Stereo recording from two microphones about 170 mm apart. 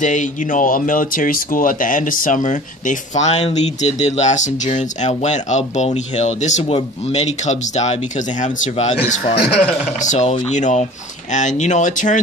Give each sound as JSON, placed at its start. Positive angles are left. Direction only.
{"t": 0.0, "sound": "speech", "side_deg": 45}
{"t": 9.3, "sound": "a man's voice", "side_deg": 70}
{"t": 10.0, "sound": "speech", "side_deg": 40}